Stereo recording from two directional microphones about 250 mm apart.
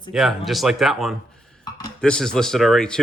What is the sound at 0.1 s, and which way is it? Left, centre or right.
Speech, centre.